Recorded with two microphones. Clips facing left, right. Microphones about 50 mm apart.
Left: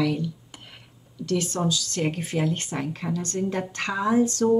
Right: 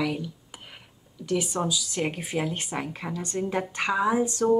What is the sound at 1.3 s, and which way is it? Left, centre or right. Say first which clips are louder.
Speech: left 1 dB; centre.